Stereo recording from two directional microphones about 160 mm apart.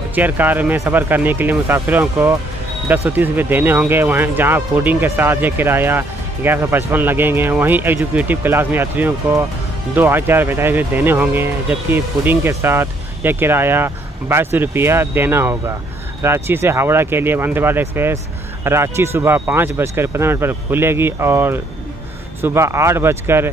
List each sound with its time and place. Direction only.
0.1 s speech: 10° right (ahead or behind)